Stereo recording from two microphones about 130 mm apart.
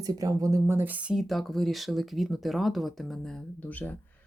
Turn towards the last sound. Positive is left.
turn(degrees=10)  # may be behind; listen again after turning